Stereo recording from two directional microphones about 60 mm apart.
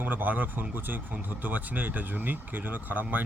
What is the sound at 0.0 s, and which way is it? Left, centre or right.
Speech, right.